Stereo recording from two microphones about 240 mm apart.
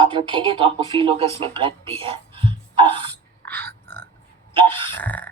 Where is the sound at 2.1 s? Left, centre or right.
Right.